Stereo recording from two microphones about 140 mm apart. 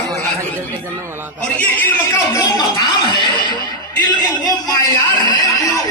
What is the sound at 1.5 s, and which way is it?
Speech, 15° left (ahead or behind).